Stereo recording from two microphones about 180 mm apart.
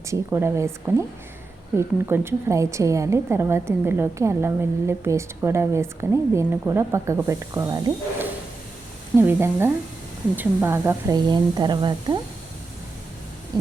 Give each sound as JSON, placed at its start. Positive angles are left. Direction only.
{"t": 0.1, "sound": "a woman's voice", "side_deg": -15}
{"t": 11.3, "sound": "speech", "side_deg": -25}